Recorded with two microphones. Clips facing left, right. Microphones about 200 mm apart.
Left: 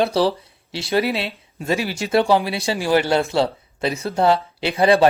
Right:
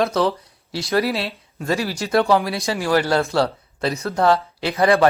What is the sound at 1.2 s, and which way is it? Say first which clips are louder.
Speech: even; 25° left (ahead or behind).